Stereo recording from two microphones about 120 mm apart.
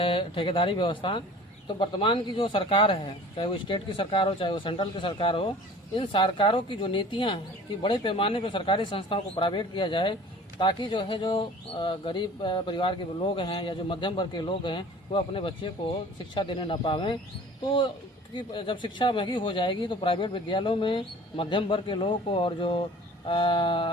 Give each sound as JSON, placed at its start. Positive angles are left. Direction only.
{"t": 0.0, "sound": "speech", "side_deg": 45}